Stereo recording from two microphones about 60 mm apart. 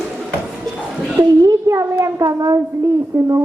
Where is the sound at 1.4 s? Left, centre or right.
Right.